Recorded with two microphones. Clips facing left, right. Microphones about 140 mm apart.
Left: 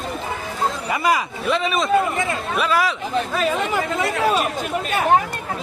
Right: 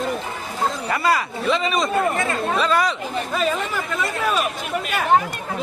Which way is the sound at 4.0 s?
80° left.